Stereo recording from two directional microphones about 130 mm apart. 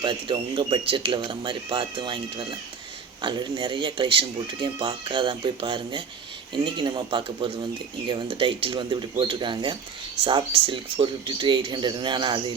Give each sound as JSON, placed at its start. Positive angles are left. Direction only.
{"t": 0.0, "sound": "speech", "side_deg": -40}